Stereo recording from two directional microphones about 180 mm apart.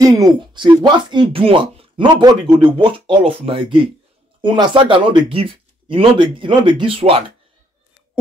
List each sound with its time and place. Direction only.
0.0 s speech: 20° right (ahead or behind)